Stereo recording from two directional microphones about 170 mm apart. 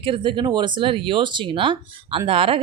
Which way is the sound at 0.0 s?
30° right (ahead or behind).